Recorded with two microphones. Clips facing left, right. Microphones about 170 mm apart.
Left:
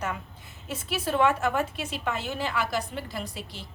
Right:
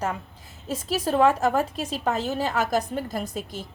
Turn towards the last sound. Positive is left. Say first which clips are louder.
# right 6 dB
turn(degrees=-45)  # may be behind; listen again after turning